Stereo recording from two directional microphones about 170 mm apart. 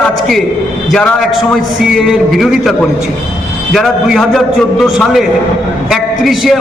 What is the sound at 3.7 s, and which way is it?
A man's voice, centre (ahead or behind).